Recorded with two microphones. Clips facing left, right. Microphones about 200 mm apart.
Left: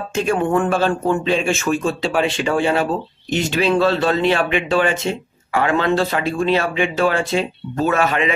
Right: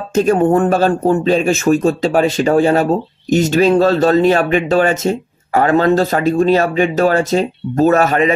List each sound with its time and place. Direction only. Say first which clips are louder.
0.1 s speech: right 6 dB; 40° right (ahead or behind)